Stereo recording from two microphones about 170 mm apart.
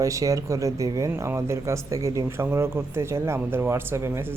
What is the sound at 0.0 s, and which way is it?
Speech, 20° right (ahead or behind).